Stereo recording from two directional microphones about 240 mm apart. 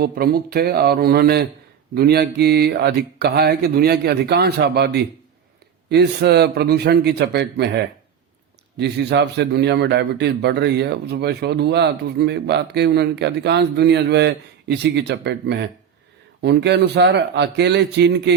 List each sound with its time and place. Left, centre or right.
0.0 s a man's voice: right
8.8 s a man's voice: right